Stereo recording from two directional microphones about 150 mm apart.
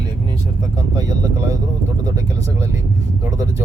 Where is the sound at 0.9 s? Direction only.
25° right (ahead or behind).